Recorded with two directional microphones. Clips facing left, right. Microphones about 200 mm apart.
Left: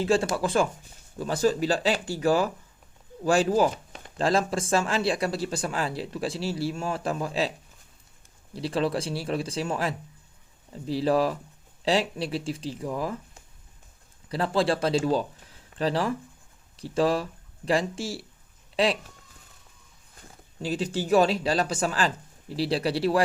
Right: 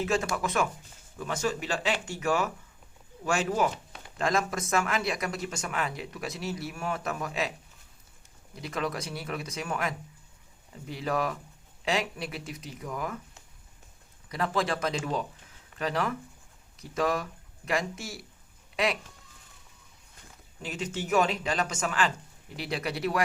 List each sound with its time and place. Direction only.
0.0 s speech: 30° left (ahead or behind)
8.5 s speech: 30° left (ahead or behind)
14.3 s speech: 30° left (ahead or behind)
20.6 s speech: 30° left (ahead or behind)